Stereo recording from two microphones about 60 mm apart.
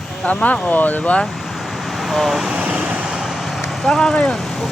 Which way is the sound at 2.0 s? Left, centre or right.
Centre.